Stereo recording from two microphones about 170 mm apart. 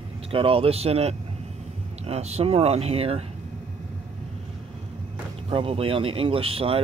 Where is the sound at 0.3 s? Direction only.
35° right (ahead or behind).